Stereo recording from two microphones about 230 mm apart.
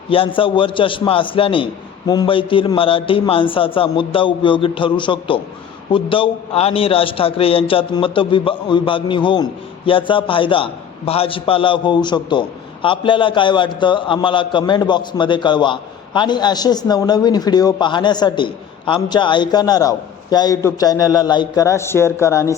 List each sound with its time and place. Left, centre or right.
0.1 s a man's voice: left